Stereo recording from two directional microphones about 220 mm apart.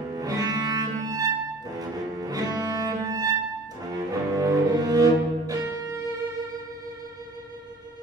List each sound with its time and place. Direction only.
0.1 s cello: 15° right (ahead or behind)
1.8 s music: 15° right (ahead or behind)
3.9 s cello: 15° right (ahead or behind)